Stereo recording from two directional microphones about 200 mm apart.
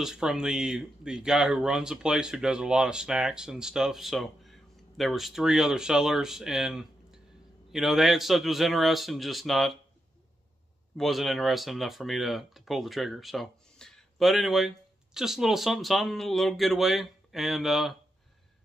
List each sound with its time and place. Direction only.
0.0 s speech: 5° right (ahead or behind)
11.0 s speech: centre (ahead or behind)